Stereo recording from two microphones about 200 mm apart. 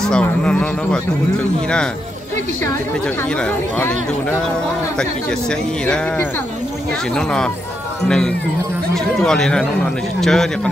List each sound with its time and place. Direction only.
0.0 s speech: 5° left (ahead or behind)
3.2 s speech: 5° left (ahead or behind)